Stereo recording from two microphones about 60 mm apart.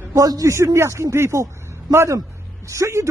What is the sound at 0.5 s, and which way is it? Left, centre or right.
Speech, right.